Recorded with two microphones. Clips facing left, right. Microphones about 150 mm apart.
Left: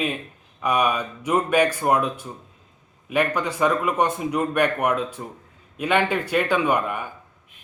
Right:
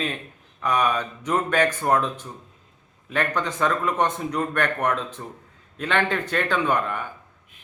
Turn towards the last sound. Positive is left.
turn(degrees=10)  # may be behind; listen again after turning